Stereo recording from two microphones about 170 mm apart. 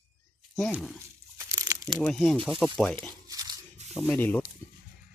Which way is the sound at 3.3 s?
20° right (ahead or behind).